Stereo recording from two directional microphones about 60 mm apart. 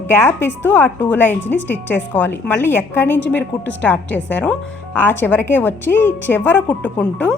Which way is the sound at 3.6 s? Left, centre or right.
Left.